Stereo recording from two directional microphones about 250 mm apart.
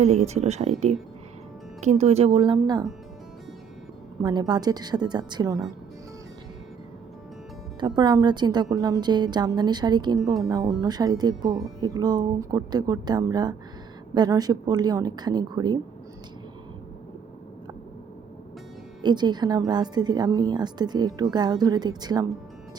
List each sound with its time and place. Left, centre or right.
0.0 s speech: right
4.2 s a woman's voice: centre
7.8 s a woman's voice: centre
19.0 s a woman's voice: centre